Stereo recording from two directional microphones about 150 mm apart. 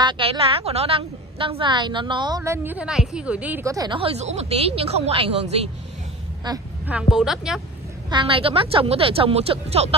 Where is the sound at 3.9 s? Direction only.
45° right (ahead or behind).